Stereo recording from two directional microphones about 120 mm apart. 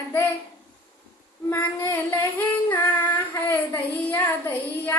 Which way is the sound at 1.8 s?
20° left (ahead or behind).